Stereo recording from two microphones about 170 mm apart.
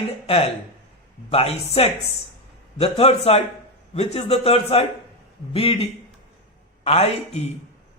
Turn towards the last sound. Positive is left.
turn(degrees=35)  # may be behind; listen again after turning